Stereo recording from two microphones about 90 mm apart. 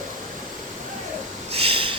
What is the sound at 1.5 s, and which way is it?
Snort, 90° right.